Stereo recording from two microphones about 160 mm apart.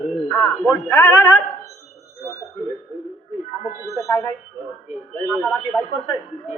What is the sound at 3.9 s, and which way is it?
Speech, 20° left (ahead or behind).